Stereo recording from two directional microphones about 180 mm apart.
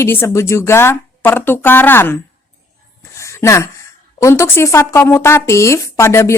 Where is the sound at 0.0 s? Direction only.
15° left (ahead or behind).